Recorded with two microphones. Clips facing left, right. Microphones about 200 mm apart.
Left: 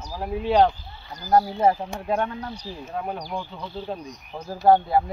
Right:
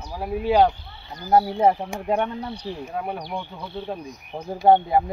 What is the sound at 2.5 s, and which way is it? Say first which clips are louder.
Speech: right 4 dB; 65° right (ahead or behind).